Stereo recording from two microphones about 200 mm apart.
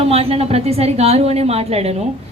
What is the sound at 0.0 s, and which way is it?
A woman's voice, 30° right (ahead or behind).